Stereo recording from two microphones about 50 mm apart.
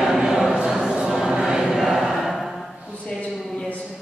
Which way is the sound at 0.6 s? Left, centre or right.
Centre.